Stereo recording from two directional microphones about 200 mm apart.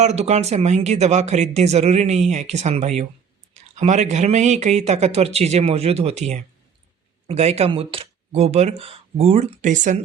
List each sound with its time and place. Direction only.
0.0 s speech: 35° right (ahead or behind)